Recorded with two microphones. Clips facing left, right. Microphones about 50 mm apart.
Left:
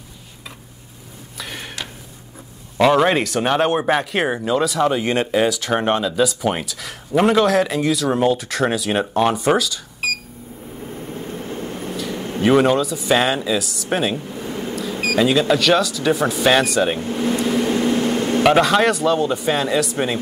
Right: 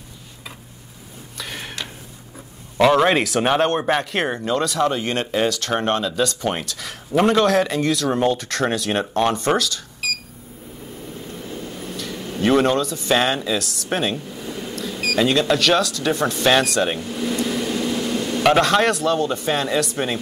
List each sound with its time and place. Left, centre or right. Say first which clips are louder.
1.4 s a sound: even; centre
2.8 s speech: even; centre
10.0 s a sound: left 4 dB; left
11.0 s vehicle: left 4 dB; left
11.9 s vehicle: left 4 dB; centre
12.4 s speech: left 2 dB; centre
14.2 s speech: left 4 dB; centre
15.1 s speech: left 2 dB; centre
17.0 s speech: left 4 dB; left
17.4 s vehicle: left 4 dB; left
18.4 s speech: left 1 dB; centre